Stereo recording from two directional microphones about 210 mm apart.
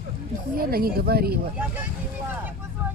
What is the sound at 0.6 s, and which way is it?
Speech, 45° right (ahead or behind).